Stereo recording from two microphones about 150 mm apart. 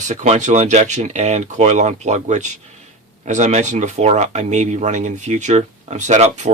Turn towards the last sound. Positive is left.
turn(degrees=-50)  # may be behind; listen again after turning